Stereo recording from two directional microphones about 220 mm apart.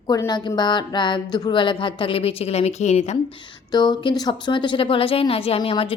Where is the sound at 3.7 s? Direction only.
20° left (ahead or behind).